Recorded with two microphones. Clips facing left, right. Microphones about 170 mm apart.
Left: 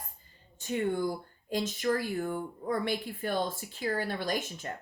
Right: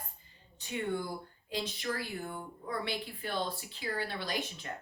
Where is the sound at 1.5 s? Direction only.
45° left (ahead or behind).